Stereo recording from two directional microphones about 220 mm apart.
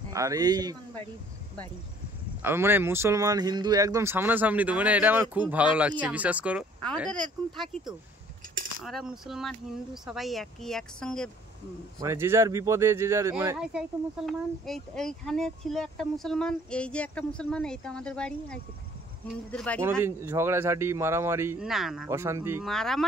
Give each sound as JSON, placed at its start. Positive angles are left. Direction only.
{"t": 0.1, "sound": "speech", "side_deg": -15}
{"t": 2.4, "sound": "speech", "side_deg": -10}
{"t": 12.0, "sound": "speech", "side_deg": -10}
{"t": 19.8, "sound": "speech", "side_deg": -10}
{"t": 22.7, "sound": "speech", "side_deg": 0}